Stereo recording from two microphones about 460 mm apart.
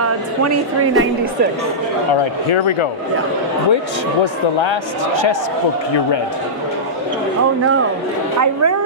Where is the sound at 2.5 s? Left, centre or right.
Left.